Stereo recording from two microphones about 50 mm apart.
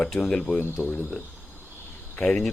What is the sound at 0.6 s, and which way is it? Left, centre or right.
Speech, left.